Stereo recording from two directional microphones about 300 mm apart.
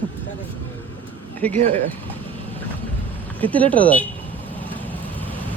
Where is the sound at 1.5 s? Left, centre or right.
Right.